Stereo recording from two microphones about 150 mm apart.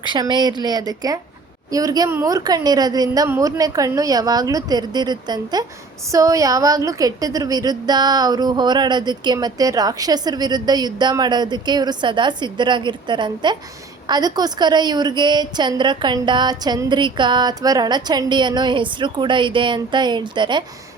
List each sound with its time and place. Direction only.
0.0 s a woman's voice: 30° right (ahead or behind)